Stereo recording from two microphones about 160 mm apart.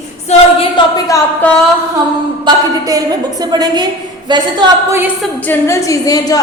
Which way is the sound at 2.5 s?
25° right (ahead or behind).